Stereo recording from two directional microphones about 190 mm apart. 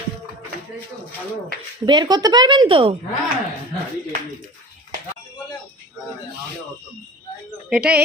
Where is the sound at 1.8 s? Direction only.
25° right (ahead or behind).